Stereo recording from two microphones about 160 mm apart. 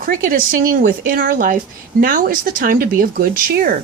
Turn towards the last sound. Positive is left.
turn(degrees=-65)  # may be behind; listen again after turning